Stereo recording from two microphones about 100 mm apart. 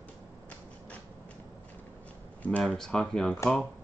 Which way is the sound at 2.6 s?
5° left (ahead or behind).